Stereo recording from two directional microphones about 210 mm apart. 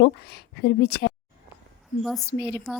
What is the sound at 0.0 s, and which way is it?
Speech, 50° left (ahead or behind).